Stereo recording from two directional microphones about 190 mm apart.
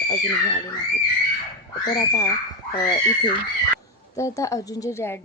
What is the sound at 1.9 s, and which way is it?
A woman's voice, 20° left (ahead or behind).